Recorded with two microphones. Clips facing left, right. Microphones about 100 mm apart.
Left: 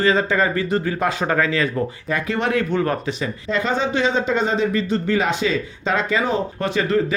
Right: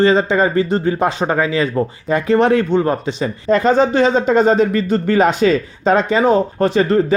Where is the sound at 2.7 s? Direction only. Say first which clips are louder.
Right 5 dB; 25° right (ahead or behind).